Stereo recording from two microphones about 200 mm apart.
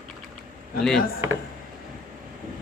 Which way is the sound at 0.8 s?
Centre (ahead or behind).